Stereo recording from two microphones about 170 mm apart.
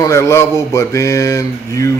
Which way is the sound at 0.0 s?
15° left (ahead or behind).